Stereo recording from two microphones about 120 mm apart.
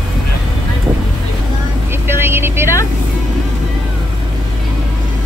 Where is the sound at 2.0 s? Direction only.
20° right (ahead or behind).